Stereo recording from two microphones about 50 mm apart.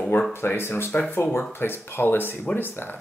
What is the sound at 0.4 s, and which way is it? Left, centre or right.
Speech, left.